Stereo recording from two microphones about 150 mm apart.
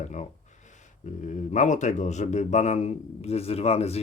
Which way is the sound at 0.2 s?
50° left (ahead or behind).